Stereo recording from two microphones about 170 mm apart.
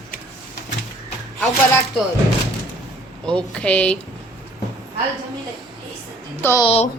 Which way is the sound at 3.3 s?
5° left (ahead or behind).